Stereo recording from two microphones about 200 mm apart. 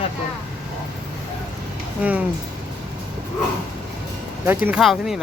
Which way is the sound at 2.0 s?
5° right (ahead or behind).